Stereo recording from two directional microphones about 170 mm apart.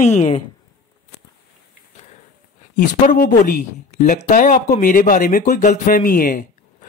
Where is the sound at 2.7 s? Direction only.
50° left (ahead or behind).